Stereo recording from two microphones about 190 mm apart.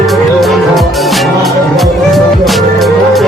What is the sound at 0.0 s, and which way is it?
Music, centre (ahead or behind).